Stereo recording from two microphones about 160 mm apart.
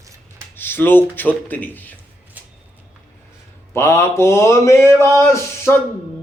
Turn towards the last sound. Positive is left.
turn(degrees=15)  # may be behind; listen again after turning